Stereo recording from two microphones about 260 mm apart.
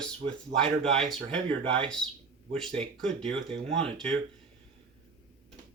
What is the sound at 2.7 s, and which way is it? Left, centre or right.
Speech, right.